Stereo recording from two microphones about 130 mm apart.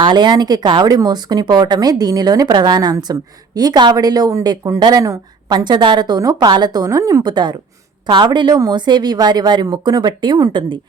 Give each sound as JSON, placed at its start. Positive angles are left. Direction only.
{"t": 0.0, "sound": "speech", "side_deg": -35}